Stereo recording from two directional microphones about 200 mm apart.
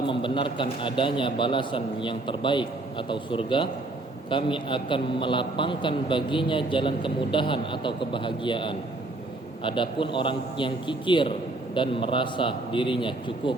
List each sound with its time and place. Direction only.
0.1 s a man's voice: 25° left (ahead or behind)